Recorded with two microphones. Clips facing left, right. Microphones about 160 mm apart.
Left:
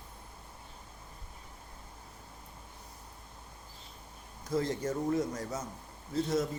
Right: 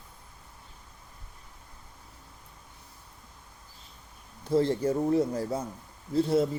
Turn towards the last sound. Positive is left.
turn(degrees=-30)  # may be behind; listen again after turning